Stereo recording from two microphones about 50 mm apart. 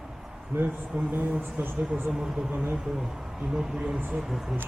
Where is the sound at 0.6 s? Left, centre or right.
Right.